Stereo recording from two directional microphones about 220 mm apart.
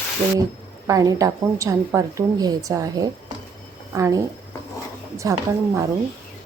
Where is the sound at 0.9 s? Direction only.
15° right (ahead or behind).